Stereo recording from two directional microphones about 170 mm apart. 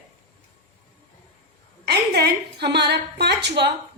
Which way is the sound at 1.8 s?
70° right (ahead or behind).